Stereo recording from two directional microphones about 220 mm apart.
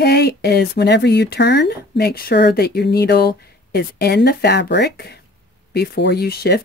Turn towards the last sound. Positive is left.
turn(degrees=45)  # may be behind; listen again after turning